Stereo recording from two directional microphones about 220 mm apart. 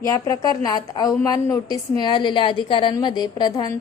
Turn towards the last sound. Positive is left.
turn(degrees=20)  # may be behind; listen again after turning